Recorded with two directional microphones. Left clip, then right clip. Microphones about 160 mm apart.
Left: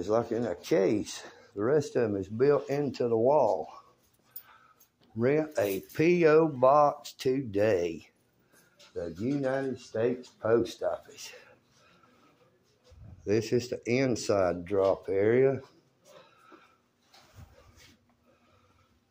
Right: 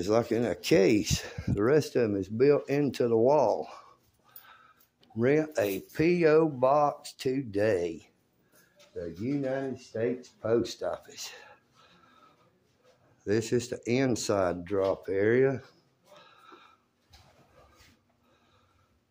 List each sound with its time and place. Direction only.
0.0 s speech: 50° right (ahead or behind)
5.0 s speech: 30° right (ahead or behind); by 8.1 s 10° right (ahead or behind)
9.9 s speech: 20° right (ahead or behind)
13.2 s speech: 20° right (ahead or behind)